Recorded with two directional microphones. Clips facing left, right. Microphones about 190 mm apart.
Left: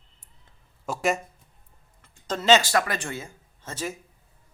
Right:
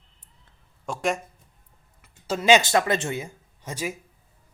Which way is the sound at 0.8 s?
5° left (ahead or behind).